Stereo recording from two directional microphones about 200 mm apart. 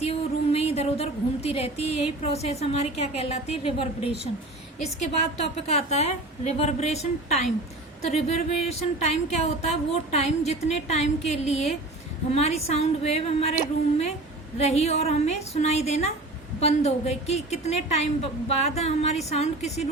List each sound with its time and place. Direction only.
0.0 s a woman's voice: 30° left (ahead or behind)
5.6 s a woman's voice: 30° left (ahead or behind)
14.6 s a woman's voice: 30° left (ahead or behind)